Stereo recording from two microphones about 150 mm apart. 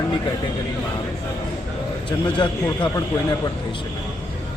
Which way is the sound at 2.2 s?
30° left (ahead or behind).